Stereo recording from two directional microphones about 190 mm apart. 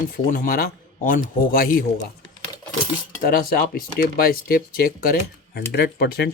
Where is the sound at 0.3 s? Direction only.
50° left (ahead or behind).